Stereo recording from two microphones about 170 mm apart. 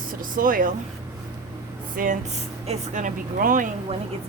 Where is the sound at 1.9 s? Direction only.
55° right (ahead or behind).